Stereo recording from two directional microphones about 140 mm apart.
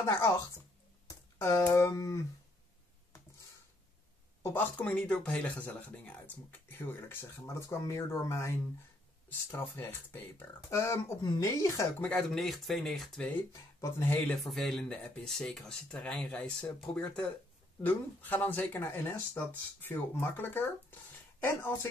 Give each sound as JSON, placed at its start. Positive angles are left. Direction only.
{"t": 1.0, "sound": "a sound", "side_deg": 25}
{"t": 1.7, "sound": "speech", "side_deg": 20}
{"t": 4.4, "sound": "a woman's voice", "side_deg": 20}
{"t": 4.7, "sound": "speech", "side_deg": 5}
{"t": 12.1, "sound": "speech", "side_deg": 5}
{"t": 13.5, "sound": "speech", "side_deg": 20}
{"t": 14.3, "sound": "speech", "side_deg": 0}